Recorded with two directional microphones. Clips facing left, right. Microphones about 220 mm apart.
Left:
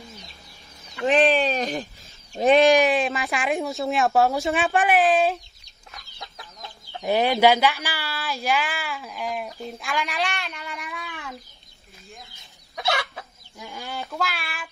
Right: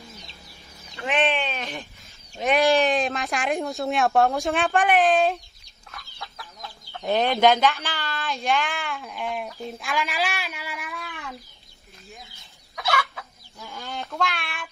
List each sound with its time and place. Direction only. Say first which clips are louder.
1.0 s a sound: left 5 dB; 35° left (ahead or behind)
2.3 s speech: left 6 dB; 35° left (ahead or behind)
2.6 s speech: even; 15° left (ahead or behind)
2.9 s speech: left 1 dB; centre (ahead or behind)
5.9 s chicken: right 1 dB; 20° left (ahead or behind)
7.1 s speech: left 1 dB; 10° left (ahead or behind)
12.7 s chicken: even; 30° left (ahead or behind)
13.6 s speech: left 1 dB; 15° left (ahead or behind)
13.9 s speech: right 1 dB; centre (ahead or behind)